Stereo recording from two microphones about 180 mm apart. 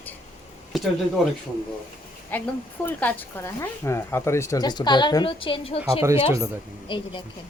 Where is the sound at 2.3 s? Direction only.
10° left (ahead or behind); by 7.0 s 25° left (ahead or behind).